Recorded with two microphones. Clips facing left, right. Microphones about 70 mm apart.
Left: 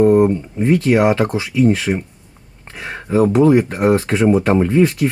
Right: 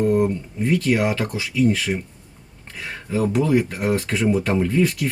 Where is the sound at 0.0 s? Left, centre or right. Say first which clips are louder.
Left 7 dB; left.